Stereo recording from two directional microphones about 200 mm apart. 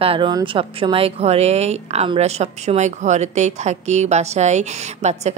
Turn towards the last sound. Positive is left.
turn(degrees=-35)  # may be behind; listen again after turning